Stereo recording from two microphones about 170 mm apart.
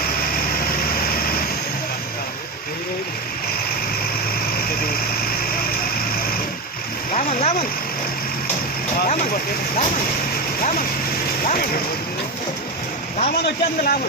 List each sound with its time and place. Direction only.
7.1 s a sound: 40° left (ahead or behind)
10.6 s vehicle: 50° left (ahead or behind)
11.4 s speech: 55° left (ahead or behind)
13.4 s a man's voice: 60° left (ahead or behind)